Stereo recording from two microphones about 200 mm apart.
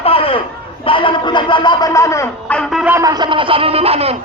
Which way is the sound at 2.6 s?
Centre (ahead or behind).